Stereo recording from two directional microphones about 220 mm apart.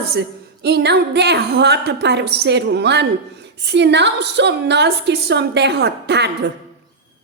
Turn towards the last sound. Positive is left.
turn(degrees=-50)  # may be behind; listen again after turning